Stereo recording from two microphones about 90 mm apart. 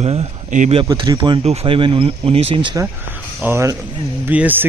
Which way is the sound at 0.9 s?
65° right (ahead or behind).